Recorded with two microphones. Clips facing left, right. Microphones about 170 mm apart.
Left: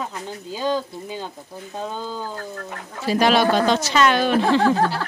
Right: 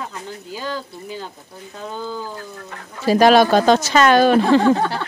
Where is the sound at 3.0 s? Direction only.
45° right (ahead or behind).